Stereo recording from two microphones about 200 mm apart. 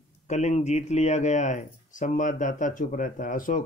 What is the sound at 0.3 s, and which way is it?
Speech, 35° left (ahead or behind).